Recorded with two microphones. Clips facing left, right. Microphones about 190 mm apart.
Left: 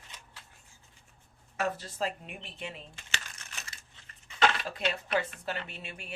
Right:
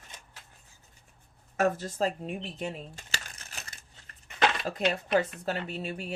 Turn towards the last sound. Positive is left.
turn(degrees=-40)  # may be behind; listen again after turning